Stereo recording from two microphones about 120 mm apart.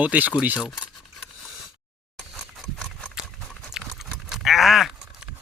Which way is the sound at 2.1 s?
5° left (ahead or behind).